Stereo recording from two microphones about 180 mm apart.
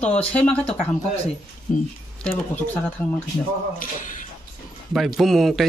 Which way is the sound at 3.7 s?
45° left (ahead or behind).